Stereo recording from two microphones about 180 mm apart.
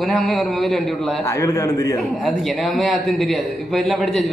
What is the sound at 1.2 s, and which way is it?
Speech, 15° left (ahead or behind).